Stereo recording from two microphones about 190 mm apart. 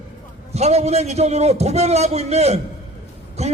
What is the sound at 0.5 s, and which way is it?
A man's voice, 35° right (ahead or behind).